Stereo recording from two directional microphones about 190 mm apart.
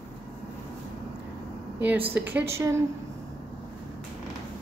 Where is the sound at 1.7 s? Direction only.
10° right (ahead or behind).